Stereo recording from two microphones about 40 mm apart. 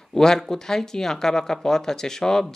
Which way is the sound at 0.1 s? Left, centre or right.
Centre.